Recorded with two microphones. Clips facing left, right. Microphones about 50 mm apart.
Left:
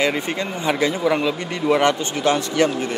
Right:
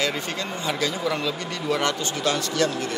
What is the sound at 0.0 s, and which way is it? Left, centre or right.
Speech, left.